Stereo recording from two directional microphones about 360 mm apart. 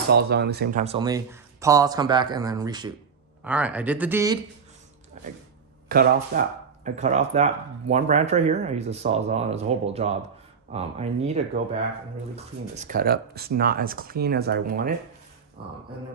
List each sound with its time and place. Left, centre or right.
0.1 s speech: right; by 4.4 s centre
5.9 s speech: right
12.7 s speech: right